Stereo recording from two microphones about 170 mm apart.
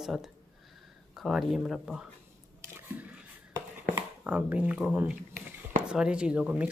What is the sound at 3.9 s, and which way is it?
Speech, 10° right (ahead or behind).